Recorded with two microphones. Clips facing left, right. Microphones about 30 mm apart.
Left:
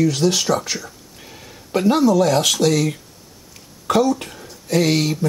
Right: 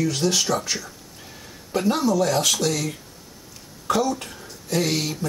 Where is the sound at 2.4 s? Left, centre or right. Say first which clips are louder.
Left 5 dB; centre.